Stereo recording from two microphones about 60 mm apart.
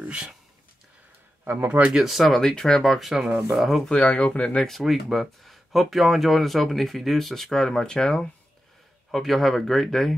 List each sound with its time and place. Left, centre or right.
0.0 s a sound: right
1.4 s speech: right
1.9 s speech: centre
3.9 s speech: left
4.6 s speech: centre
9.1 s speech: centre